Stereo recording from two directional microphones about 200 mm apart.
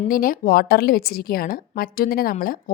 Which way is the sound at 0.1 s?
45° left (ahead or behind).